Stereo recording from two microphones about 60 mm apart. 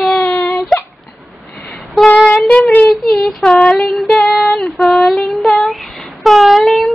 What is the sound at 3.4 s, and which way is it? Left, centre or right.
Child singing, centre.